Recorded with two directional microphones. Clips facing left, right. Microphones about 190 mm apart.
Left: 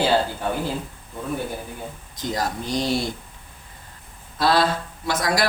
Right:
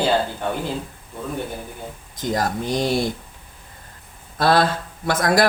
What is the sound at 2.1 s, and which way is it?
Speech, 50° right (ahead or behind).